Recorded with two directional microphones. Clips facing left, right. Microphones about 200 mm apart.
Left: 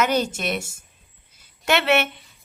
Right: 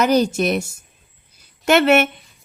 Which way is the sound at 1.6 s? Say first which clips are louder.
Right 6 dB; 45° right (ahead or behind).